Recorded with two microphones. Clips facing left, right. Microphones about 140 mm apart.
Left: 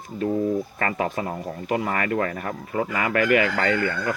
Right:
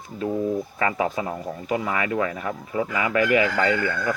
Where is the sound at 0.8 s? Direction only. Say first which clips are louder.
Right 1 dB; 45° left (ahead or behind).